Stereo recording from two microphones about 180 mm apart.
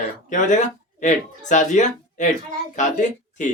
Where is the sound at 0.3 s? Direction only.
45° left (ahead or behind).